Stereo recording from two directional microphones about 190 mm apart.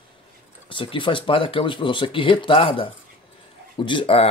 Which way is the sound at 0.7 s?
25° left (ahead or behind).